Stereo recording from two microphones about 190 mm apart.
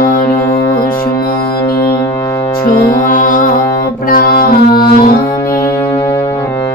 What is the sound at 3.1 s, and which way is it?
Music, 45° left (ahead or behind).